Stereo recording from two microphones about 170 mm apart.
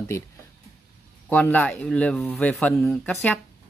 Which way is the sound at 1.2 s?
10° left (ahead or behind).